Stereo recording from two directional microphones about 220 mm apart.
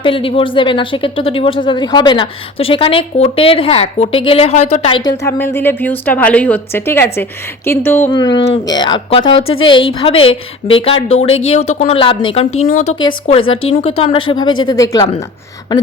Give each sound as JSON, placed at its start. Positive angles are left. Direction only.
{"t": 0.0, "sound": "speech", "side_deg": 25}
{"t": 8.1, "sound": "speech", "side_deg": 20}
{"t": 12.5, "sound": "speech", "side_deg": 40}
{"t": 12.9, "sound": "speech", "side_deg": 25}